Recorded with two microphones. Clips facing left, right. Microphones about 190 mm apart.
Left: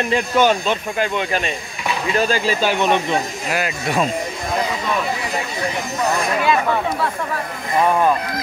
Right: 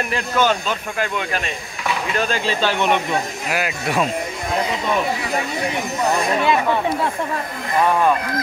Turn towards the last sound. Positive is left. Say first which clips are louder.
# right 1 dB
turn(degrees=-20)  # may be behind; listen again after turning